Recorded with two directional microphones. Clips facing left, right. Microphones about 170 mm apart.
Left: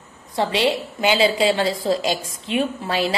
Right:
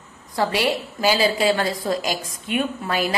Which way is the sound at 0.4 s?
25° left (ahead or behind).